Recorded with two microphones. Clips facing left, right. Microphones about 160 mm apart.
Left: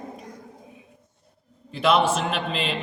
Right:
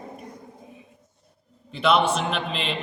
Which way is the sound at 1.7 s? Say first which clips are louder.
Even; 5° left (ahead or behind).